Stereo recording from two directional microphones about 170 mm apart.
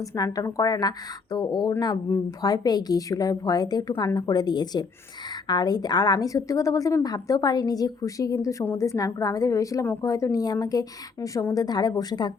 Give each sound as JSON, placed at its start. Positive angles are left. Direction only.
{"t": 0.0, "sound": "a woman's voice", "side_deg": 15}